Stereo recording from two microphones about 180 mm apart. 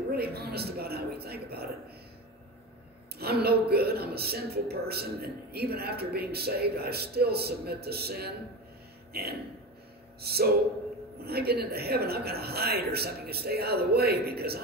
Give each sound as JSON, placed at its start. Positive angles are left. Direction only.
{"t": 0.1, "sound": "a woman's voice", "side_deg": -60}
{"t": 3.2, "sound": "a woman's voice", "side_deg": -60}